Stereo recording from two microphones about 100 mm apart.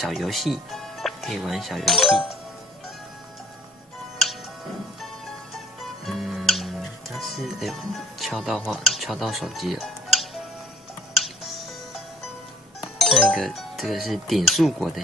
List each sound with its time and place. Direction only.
0.0 s speech: centre (ahead or behind)
5.0 s music: centre (ahead or behind)
13.0 s speech: 5° right (ahead or behind)